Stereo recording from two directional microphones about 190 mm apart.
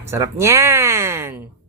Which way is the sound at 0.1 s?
15° right (ahead or behind).